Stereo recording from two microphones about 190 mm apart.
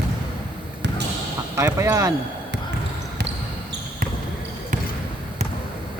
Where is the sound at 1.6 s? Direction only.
15° right (ahead or behind).